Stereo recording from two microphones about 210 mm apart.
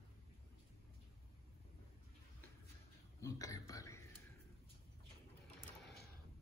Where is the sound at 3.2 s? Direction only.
15° left (ahead or behind).